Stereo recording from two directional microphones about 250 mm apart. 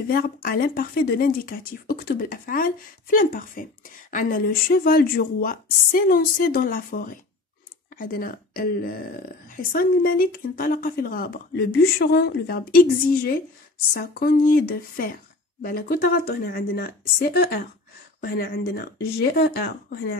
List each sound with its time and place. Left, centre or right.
0.1 s speech: left